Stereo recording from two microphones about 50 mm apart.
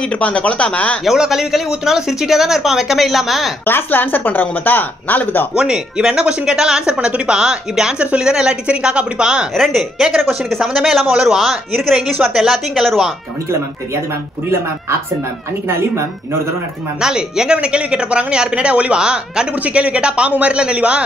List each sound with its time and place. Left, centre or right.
0.0 s speech: left
1.0 s speech: centre
3.6 s speech: left
5.6 s speech: centre
9.5 s a woman's voice: centre
9.8 s speech: centre
12.1 s speech: centre
12.4 s speech: centre
17.0 s speech: centre